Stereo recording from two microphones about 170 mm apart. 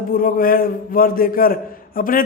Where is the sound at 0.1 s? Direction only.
55° left (ahead or behind).